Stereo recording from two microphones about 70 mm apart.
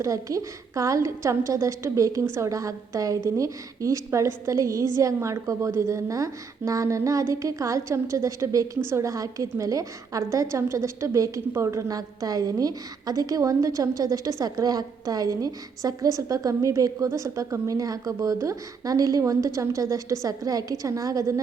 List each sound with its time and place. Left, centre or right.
0.0 s a woman's voice: right